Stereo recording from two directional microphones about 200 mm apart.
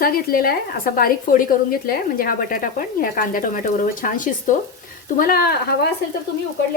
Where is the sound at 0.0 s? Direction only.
45° left (ahead or behind).